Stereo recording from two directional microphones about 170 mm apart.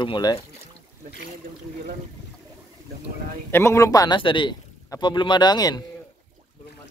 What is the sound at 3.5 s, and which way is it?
A man's voice, 15° left (ahead or behind).